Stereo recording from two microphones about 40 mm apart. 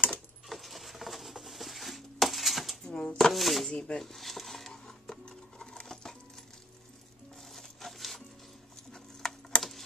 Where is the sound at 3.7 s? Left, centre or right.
Left.